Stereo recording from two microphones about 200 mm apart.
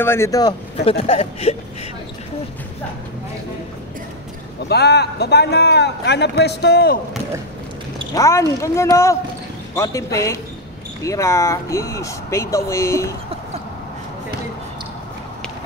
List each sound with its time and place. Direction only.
0.0 s speech: 15° left (ahead or behind); by 1.6 s 30° left (ahead or behind)
4.6 s a man's voice: 55° left (ahead or behind)
8.1 s speech: 15° left (ahead or behind)